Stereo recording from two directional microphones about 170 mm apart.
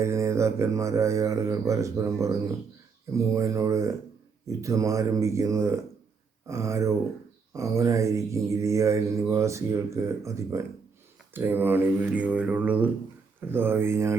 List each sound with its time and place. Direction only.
0.0 s mantra: 15° right (ahead or behind)
3.1 s speech: 20° right (ahead or behind)
6.5 s mantra: 15° right (ahead or behind)